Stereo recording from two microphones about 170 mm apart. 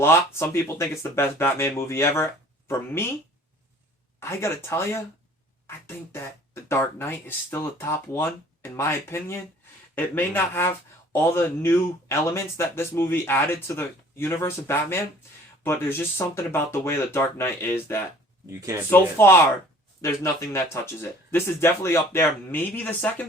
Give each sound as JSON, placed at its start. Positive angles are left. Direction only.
{"t": 0.0, "sound": "speech", "side_deg": 15}
{"t": 4.2, "sound": "speech", "side_deg": 15}